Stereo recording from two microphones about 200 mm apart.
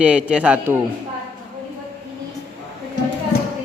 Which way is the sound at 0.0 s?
5° right (ahead or behind).